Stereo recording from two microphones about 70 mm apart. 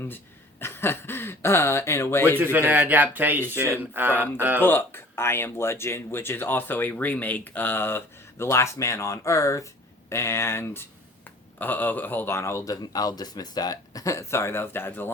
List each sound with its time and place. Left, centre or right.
0.6 s speech: left
2.4 s speech: right
4.6 s speech: left
12.6 s speech: left